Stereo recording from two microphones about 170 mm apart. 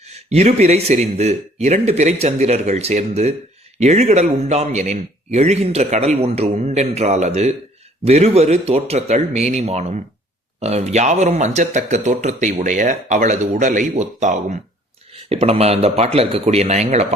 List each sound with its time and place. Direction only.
0.3 s a man's voice: 40° right (ahead or behind)